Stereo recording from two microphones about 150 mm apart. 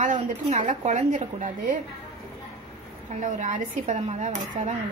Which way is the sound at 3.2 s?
55° right (ahead or behind).